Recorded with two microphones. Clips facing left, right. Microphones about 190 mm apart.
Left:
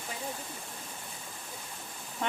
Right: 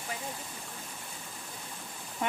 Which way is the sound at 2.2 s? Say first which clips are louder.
Right 1 dB; 5° right (ahead or behind).